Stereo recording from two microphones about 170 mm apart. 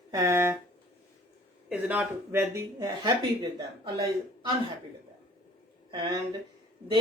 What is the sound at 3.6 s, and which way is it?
Speech, 25° right (ahead or behind).